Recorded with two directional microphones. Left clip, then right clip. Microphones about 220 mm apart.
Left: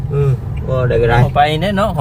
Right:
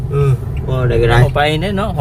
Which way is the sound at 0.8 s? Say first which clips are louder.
Even; 45° right (ahead or behind).